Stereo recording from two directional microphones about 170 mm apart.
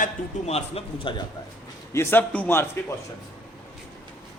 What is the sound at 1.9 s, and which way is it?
Speech, 15° left (ahead or behind).